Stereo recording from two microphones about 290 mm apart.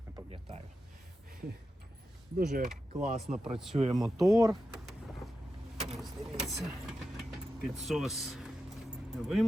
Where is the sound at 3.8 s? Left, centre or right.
Right.